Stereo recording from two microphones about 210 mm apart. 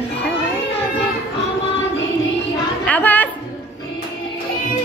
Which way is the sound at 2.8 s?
10° left (ahead or behind).